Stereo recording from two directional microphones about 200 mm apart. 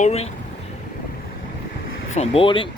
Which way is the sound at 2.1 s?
30° left (ahead or behind).